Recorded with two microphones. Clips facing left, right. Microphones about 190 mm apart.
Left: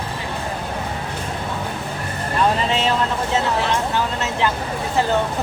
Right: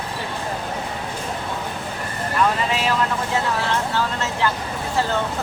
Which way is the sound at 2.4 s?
25° left (ahead or behind).